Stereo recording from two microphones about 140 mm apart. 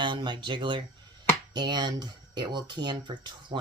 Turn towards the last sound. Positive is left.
turn(degrees=-35)  # may be behind; listen again after turning